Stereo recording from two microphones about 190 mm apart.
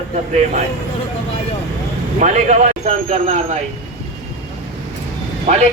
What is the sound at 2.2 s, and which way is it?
Speech, 40° right (ahead or behind).